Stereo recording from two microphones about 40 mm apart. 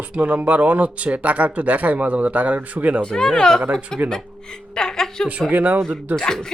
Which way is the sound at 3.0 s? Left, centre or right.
Centre.